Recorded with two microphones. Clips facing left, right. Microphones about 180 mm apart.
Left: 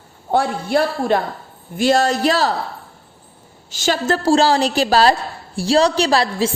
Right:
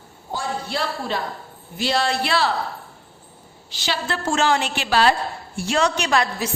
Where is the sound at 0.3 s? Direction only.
60° left (ahead or behind); by 2.6 s 40° left (ahead or behind).